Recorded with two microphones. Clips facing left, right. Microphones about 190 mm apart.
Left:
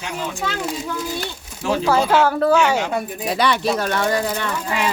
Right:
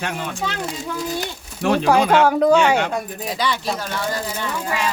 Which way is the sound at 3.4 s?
65° left (ahead or behind).